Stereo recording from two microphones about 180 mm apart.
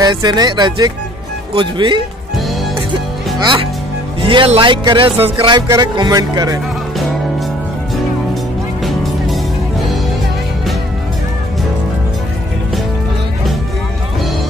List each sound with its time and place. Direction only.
0.0 s music: 25° right (ahead or behind)
3.3 s speech: 25° right (ahead or behind)
4.3 s music: 30° right (ahead or behind)
8.8 s music: centre (ahead or behind)